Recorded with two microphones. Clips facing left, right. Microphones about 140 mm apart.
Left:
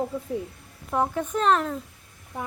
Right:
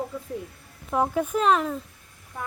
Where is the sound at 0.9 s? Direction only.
5° right (ahead or behind).